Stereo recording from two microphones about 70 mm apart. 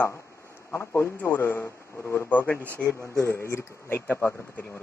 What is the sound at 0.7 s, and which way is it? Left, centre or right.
Speech, left.